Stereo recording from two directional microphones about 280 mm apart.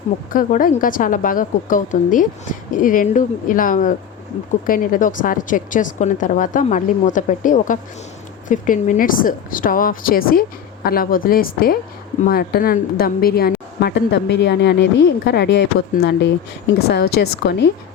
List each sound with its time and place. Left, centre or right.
0.3 s a woman's voice: left